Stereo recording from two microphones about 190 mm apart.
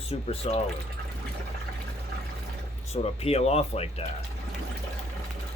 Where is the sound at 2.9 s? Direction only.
35° left (ahead or behind).